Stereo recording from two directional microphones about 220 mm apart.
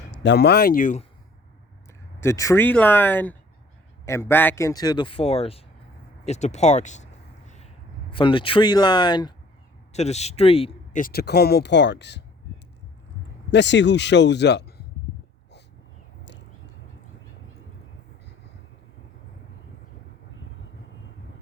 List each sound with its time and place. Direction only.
0.1 s speech: 55° left (ahead or behind); by 1.0 s 35° left (ahead or behind)
2.2 s a man's voice: 15° left (ahead or behind)
6.2 s a sound: 30° left (ahead or behind)
8.1 s speech: 20° left (ahead or behind)
9.9 s speech: 30° left (ahead or behind)
11.0 s speech: 45° left (ahead or behind)
13.5 s speech: 55° left (ahead or behind)